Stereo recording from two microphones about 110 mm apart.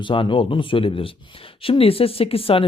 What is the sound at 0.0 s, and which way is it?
Speech, 50° left (ahead or behind).